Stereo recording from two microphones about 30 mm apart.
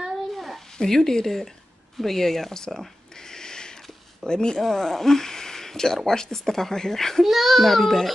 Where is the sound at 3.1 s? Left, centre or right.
Left.